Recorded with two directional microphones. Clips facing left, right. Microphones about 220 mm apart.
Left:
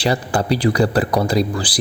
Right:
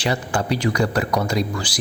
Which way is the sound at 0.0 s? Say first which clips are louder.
Left 4 dB; 35° left (ahead or behind).